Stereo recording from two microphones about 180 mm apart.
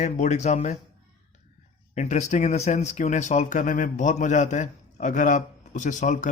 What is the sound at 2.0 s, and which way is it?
Speech, 40° left (ahead or behind).